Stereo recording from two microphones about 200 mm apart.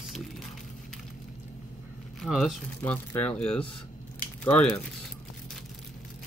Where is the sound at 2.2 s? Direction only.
Centre (ahead or behind).